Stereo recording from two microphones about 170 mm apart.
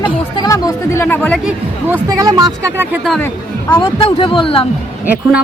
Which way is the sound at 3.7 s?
30° left (ahead or behind).